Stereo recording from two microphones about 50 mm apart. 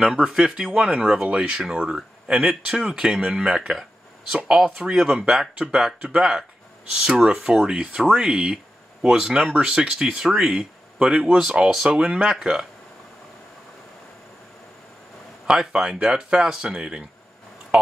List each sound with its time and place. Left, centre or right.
0.0 s speech: centre
1.2 s speech: right
2.0 s speech: centre
11.1 s speech: centre
15.4 s speech: centre